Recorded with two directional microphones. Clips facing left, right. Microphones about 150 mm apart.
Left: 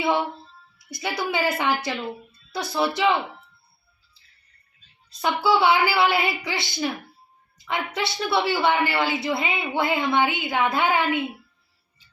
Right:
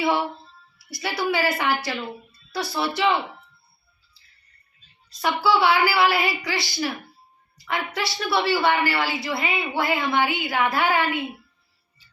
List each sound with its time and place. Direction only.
0.9 s a woman's voice: 20° left (ahead or behind)
5.2 s a woman's voice: 20° left (ahead or behind)
7.9 s a woman's voice: 20° left (ahead or behind)